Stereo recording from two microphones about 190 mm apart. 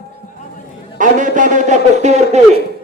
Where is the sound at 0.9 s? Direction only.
45° right (ahead or behind).